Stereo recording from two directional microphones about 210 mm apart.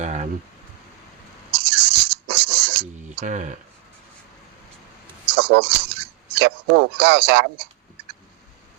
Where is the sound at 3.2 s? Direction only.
35° right (ahead or behind).